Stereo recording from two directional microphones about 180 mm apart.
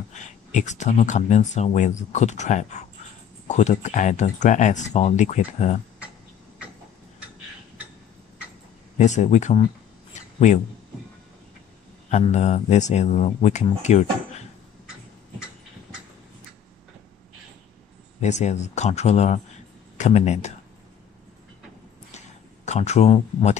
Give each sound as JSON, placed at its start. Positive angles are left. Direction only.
{"t": 0.1, "sound": "speech", "side_deg": 40}
{"t": 8.9, "sound": "speech", "side_deg": 40}
{"t": 12.1, "sound": "speech", "side_deg": 40}
{"t": 18.2, "sound": "speech", "side_deg": 40}
{"t": 22.7, "sound": "speech", "side_deg": 40}